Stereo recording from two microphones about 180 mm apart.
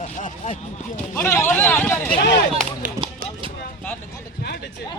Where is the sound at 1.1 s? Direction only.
15° left (ahead or behind).